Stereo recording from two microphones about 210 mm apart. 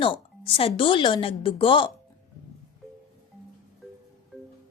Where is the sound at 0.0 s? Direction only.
25° left (ahead or behind).